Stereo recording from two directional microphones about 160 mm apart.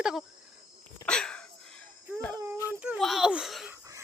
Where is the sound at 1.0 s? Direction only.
5° left (ahead or behind).